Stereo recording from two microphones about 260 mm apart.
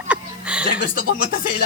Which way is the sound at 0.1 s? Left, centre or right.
Centre.